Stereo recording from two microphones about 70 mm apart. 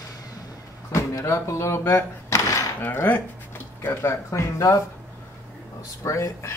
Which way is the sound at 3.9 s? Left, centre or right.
Left.